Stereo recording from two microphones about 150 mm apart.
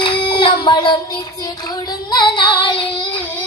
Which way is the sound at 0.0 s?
35° left (ahead or behind).